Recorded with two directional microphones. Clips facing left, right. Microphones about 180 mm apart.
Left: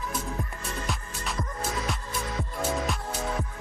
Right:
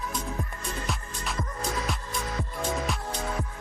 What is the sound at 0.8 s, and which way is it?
Music, centre (ahead or behind).